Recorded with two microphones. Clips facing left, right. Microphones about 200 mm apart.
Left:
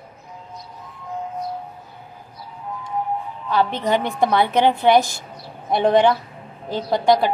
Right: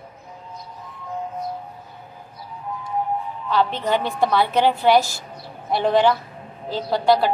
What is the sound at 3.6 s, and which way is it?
A woman's voice, 15° left (ahead or behind).